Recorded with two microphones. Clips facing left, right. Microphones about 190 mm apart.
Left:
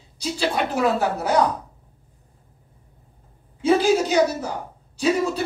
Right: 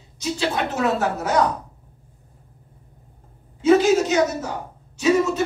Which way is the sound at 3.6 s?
35° left (ahead or behind).